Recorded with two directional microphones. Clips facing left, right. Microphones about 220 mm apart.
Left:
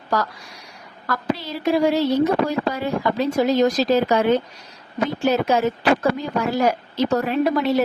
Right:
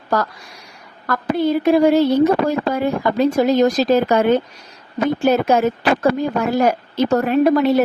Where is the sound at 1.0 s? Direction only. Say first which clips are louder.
Right 7 dB; 50° right (ahead or behind).